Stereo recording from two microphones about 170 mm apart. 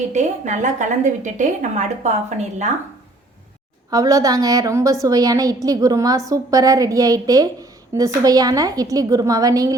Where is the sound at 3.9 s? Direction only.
20° right (ahead or behind).